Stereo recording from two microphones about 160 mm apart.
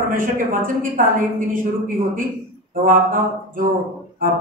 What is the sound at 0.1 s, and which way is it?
A man's voice, 60° right (ahead or behind).